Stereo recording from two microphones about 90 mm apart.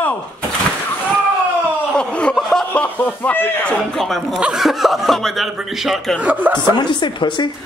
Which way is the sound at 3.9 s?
Centre (ahead or behind).